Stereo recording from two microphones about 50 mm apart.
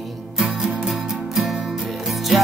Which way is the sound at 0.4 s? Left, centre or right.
Centre.